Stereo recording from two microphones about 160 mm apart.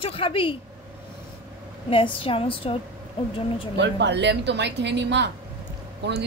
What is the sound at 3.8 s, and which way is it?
A woman's voice, 90° right.